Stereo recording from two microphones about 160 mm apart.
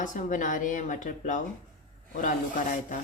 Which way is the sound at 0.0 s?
55° left (ahead or behind).